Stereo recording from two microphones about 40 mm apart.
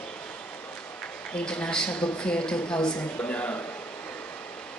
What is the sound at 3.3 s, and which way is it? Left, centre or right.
Speech, left.